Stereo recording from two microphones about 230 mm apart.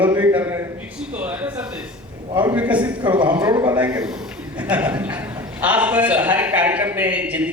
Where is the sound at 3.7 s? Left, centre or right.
Centre.